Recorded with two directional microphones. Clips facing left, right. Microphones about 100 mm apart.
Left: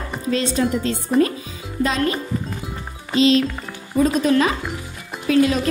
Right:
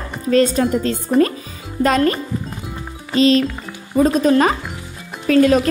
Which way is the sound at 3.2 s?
45° right (ahead or behind).